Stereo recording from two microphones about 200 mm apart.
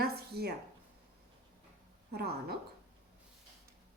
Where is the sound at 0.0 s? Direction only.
50° right (ahead or behind).